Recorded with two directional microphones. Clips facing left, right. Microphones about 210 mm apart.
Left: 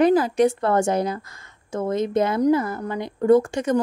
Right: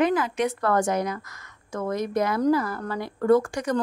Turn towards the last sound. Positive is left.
turn(degrees=25)  # may be behind; listen again after turning